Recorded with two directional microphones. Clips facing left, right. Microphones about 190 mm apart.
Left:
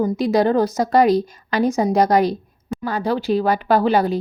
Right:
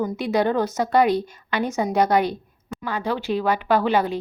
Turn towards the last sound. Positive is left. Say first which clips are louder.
# left 3 dB
turn(degrees=35)  # may be behind; listen again after turning